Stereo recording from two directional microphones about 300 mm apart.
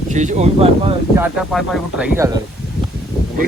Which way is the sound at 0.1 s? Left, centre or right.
Right.